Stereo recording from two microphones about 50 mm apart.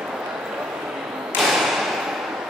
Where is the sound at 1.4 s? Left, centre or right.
Centre.